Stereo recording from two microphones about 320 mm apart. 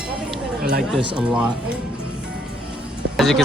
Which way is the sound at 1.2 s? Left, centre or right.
Centre.